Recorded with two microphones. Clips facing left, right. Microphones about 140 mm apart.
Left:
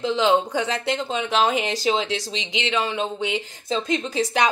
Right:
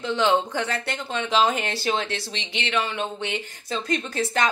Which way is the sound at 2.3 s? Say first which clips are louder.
Left 4 dB; 90° left.